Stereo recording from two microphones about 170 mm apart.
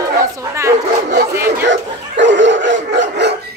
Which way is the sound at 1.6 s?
90° right.